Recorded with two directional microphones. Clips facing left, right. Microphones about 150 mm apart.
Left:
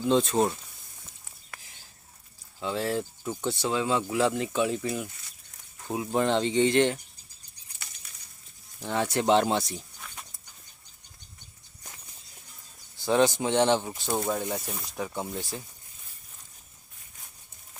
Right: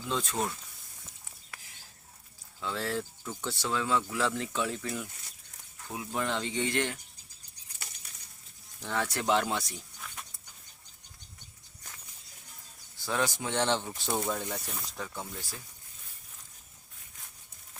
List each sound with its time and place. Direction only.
0.0 s speech: 25° left (ahead or behind)
1.5 s a sound: 50° left (ahead or behind)
2.6 s speech: 20° left (ahead or behind)
5.8 s speech: 30° left (ahead or behind)
8.8 s speech: 20° left (ahead or behind)
13.1 s speech: 25° left (ahead or behind)